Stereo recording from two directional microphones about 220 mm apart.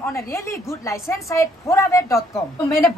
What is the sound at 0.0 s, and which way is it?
A woman's voice, 15° left (ahead or behind).